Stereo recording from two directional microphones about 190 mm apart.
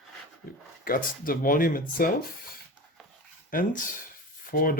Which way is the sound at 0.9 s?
45° left (ahead or behind).